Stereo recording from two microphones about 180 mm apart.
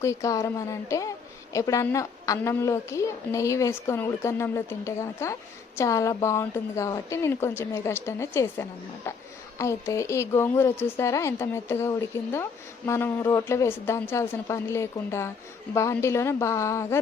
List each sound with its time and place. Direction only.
0.0 s a woman's voice: 15° left (ahead or behind)